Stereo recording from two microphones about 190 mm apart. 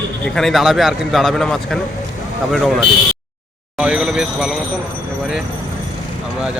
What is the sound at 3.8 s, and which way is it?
Speech, 5° right (ahead or behind).